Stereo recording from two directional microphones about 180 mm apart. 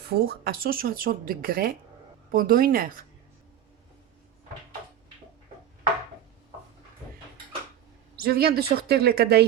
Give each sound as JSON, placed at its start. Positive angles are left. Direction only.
{"t": 0.0, "sound": "a woman's voice", "side_deg": -60}
{"t": 8.1, "sound": "speech", "side_deg": -60}